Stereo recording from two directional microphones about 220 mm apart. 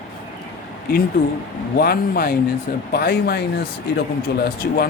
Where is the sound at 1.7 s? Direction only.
45° left (ahead or behind).